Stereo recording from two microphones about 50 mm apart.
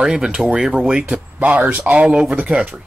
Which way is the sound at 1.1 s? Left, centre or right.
Right.